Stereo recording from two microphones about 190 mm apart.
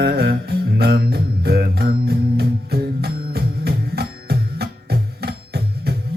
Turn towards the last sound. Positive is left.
turn(degrees=-55)  # may be behind; listen again after turning